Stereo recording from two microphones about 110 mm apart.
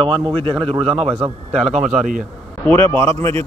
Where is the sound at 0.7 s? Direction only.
65° right (ahead or behind); by 2.1 s 90° right.